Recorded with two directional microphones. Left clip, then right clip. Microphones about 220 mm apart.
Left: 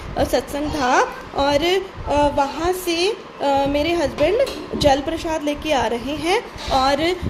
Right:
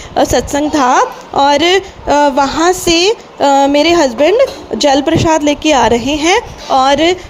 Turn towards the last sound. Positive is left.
turn(degrees=-30)  # may be behind; listen again after turning